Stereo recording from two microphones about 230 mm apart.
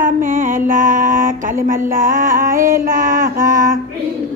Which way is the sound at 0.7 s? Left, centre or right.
Right.